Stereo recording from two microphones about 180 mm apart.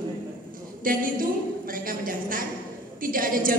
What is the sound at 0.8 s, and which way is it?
A woman's voice, 50° right (ahead or behind).